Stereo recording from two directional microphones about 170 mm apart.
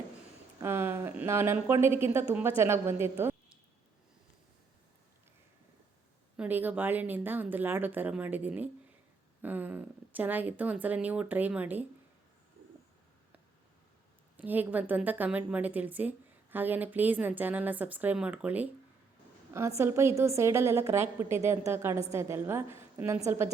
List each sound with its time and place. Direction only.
0.6 s speech: 15° right (ahead or behind)
6.3 s a woman's voice: 10° right (ahead or behind)
14.3 s a woman's voice: 10° right (ahead or behind)